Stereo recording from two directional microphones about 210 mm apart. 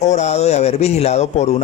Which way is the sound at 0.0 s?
35° left (ahead or behind).